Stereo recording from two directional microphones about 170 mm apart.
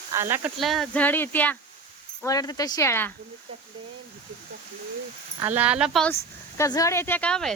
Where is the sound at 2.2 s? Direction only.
20° left (ahead or behind).